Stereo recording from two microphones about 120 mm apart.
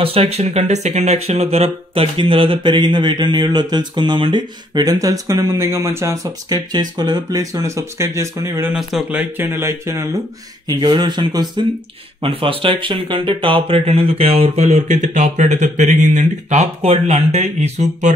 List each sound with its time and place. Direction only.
0.0 s speech: 50° right (ahead or behind); by 8.7 s 20° right (ahead or behind)
8.7 s speech: 10° right (ahead or behind)
10.7 s speech: 40° right (ahead or behind)
12.2 s speech: 50° right (ahead or behind); by 18.1 s 65° right (ahead or behind)